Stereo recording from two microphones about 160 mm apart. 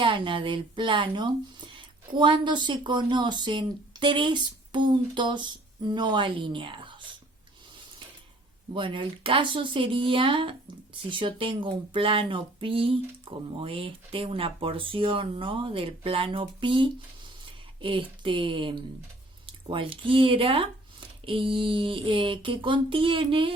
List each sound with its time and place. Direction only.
0.0 s speech: 30° right (ahead or behind)
8.7 s speech: 30° right (ahead or behind)